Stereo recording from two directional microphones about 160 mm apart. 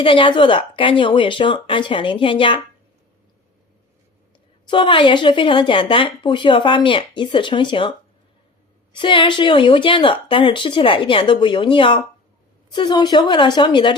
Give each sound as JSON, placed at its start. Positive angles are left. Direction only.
{"t": 0.0, "sound": "speech", "side_deg": 35}
{"t": 4.7, "sound": "speech", "side_deg": 30}
{"t": 9.0, "sound": "a woman's voice", "side_deg": 30}